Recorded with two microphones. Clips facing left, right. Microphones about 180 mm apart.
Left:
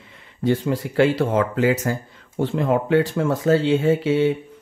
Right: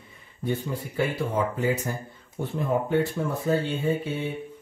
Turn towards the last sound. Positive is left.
turn(degrees=90)